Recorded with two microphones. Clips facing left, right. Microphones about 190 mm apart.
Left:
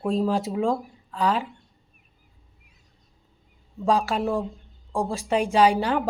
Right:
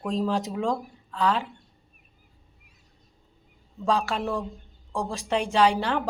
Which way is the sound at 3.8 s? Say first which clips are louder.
Left 3 dB; 10° left (ahead or behind).